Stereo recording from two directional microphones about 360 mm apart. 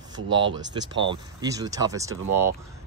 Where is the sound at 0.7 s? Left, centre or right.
Centre.